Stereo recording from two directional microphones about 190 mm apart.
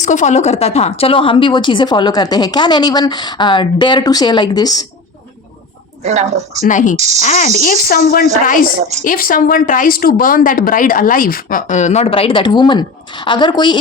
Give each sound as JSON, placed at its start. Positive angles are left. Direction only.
{"t": 0.0, "sound": "a woman's voice", "side_deg": 40}
{"t": 6.0, "sound": "a woman's voice", "side_deg": -35}
{"t": 6.7, "sound": "a woman's voice", "side_deg": 40}
{"t": 6.9, "sound": "a woman's voice", "side_deg": -35}
{"t": 7.2, "sound": "speech", "side_deg": 40}